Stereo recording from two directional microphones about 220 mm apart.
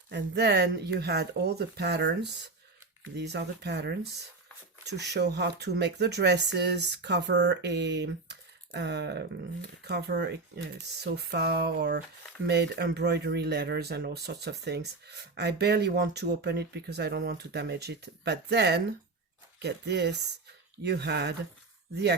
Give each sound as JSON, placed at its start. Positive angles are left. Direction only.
{"t": 0.1, "sound": "speech", "side_deg": -50}